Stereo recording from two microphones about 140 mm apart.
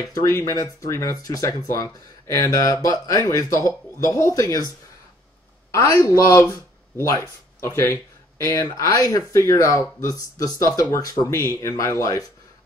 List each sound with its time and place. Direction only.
0.1 s speech: 20° left (ahead or behind)
5.7 s speech: 20° left (ahead or behind)